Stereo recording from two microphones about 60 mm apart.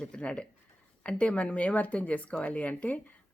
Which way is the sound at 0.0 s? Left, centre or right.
Centre.